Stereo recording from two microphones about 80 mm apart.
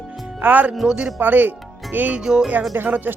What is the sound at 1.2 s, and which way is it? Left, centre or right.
Speech, right.